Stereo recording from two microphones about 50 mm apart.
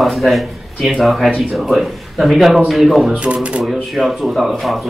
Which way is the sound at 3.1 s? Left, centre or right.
Right.